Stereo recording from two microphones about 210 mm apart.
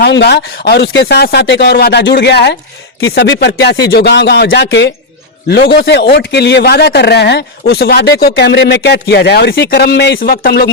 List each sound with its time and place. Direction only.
0.0 s speech: 50° left (ahead or behind)